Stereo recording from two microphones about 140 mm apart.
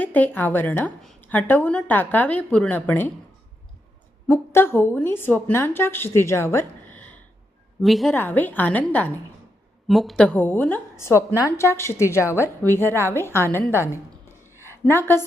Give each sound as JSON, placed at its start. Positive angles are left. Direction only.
{"t": 0.0, "sound": "a woman's voice", "side_deg": 10}
{"t": 4.3, "sound": "a woman's voice", "side_deg": 15}
{"t": 7.8, "sound": "a woman's voice", "side_deg": 0}
{"t": 8.1, "sound": "a woman's voice", "side_deg": 15}
{"t": 9.8, "sound": "a woman's voice", "side_deg": 0}
{"t": 14.6, "sound": "a sound", "side_deg": 20}